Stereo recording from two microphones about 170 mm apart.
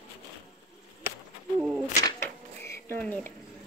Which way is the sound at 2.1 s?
15° left (ahead or behind).